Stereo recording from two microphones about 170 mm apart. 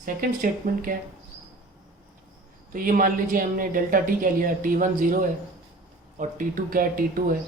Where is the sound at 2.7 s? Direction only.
55° right (ahead or behind).